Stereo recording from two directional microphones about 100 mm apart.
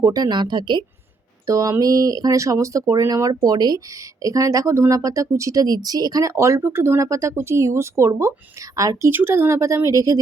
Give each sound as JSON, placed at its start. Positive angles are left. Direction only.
{"t": 0.0, "sound": "a woman's voice", "side_deg": -40}
{"t": 1.5, "sound": "speech", "side_deg": -35}